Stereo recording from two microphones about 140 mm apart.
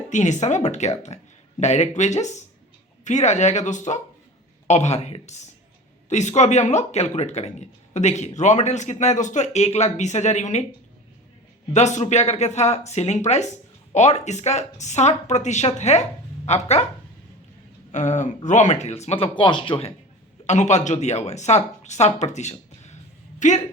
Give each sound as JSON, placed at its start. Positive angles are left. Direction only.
{"t": 0.1, "sound": "speech", "side_deg": 55}
{"t": 11.7, "sound": "speech", "side_deg": 55}
{"t": 17.9, "sound": "speech", "side_deg": 60}
{"t": 20.5, "sound": "speech", "side_deg": 55}